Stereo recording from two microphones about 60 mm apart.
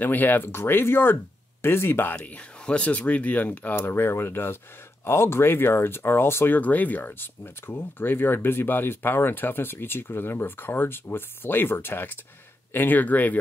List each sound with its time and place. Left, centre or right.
0.0 s speech: left
2.1 s speech: centre
3.7 s speech: left
6.6 s speech: left